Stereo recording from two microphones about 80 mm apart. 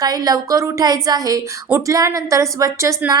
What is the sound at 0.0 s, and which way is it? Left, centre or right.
A woman's voice, right.